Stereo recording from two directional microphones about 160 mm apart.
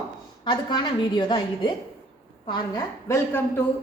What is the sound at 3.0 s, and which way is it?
Speech, 15° left (ahead or behind).